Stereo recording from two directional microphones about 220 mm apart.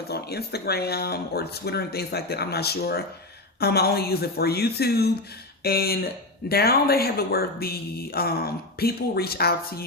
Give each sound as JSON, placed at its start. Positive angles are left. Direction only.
{"t": 0.1, "sound": "speech", "side_deg": 45}